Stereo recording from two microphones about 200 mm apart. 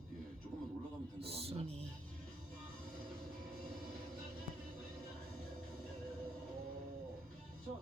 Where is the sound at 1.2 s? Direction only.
30° right (ahead or behind).